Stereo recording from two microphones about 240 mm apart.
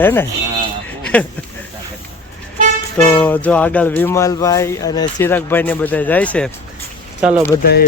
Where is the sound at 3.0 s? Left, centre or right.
Centre.